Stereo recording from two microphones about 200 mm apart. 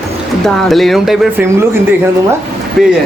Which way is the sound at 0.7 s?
Centre (ahead or behind).